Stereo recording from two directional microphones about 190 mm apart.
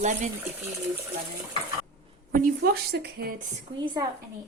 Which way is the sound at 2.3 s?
55° right (ahead or behind).